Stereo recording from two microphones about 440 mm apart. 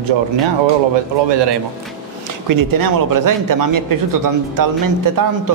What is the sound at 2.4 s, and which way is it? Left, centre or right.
Speech, right.